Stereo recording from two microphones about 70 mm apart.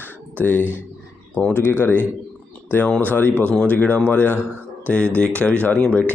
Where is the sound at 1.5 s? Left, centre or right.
Right.